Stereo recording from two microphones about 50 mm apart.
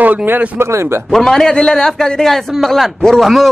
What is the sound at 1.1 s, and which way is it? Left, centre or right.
A man's voice, centre.